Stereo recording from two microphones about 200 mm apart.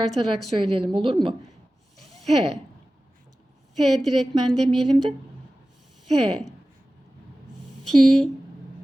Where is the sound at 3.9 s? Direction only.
Centre (ahead or behind).